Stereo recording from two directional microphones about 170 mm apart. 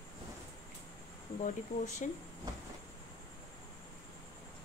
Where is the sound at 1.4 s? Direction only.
50° left (ahead or behind).